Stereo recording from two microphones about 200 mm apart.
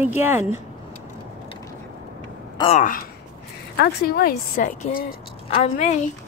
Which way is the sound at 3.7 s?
50° left (ahead or behind).